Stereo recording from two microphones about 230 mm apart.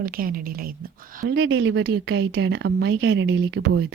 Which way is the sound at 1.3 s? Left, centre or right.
Right.